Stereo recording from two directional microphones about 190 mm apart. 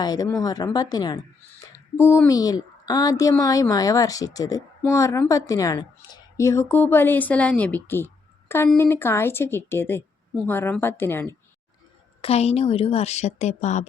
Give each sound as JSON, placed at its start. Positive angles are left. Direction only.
{"t": 0.0, "sound": "speech", "side_deg": 20}
{"t": 12.2, "sound": "a woman's voice", "side_deg": 30}